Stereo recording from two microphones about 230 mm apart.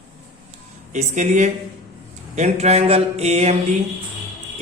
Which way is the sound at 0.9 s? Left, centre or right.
Right.